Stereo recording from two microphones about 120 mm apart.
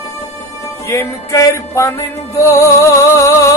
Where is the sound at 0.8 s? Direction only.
25° left (ahead or behind).